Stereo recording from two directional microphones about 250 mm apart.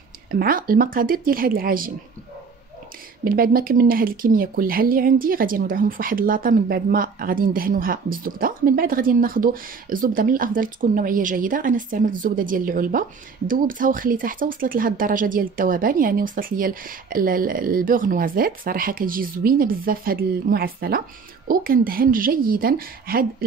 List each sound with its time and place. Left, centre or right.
0.3 s speech: right
3.3 s speech: right